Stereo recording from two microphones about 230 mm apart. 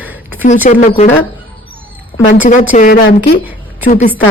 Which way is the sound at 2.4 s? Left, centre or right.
Left.